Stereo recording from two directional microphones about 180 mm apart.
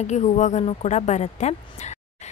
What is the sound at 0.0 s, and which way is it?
Speech, 40° left (ahead or behind).